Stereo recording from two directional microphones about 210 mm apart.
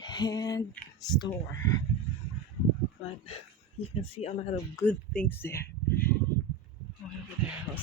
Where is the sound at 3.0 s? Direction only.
30° left (ahead or behind).